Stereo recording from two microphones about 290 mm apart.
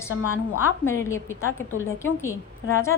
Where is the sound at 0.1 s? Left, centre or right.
Left.